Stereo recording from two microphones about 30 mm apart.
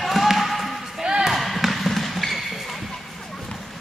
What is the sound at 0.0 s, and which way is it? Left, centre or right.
Music, centre.